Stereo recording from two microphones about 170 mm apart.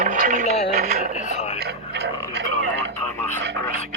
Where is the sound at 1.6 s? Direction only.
75° right (ahead or behind).